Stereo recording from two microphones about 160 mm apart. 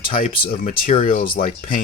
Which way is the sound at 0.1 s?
60° left (ahead or behind).